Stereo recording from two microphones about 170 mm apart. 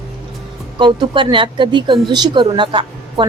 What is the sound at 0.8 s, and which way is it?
Speech, 25° right (ahead or behind).